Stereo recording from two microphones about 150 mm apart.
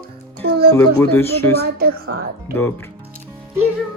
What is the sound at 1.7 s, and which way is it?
Speech, 85° right.